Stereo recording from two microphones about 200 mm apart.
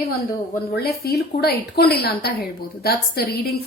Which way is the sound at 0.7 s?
50° left (ahead or behind).